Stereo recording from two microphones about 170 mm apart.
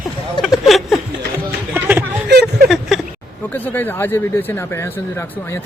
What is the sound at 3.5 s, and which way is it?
Speech, 10° left (ahead or behind).